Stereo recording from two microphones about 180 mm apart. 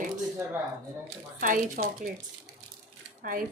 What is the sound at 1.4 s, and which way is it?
Speech, 50° right (ahead or behind).